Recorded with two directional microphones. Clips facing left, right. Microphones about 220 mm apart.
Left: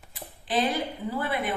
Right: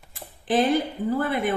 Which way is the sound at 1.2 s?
50° right (ahead or behind).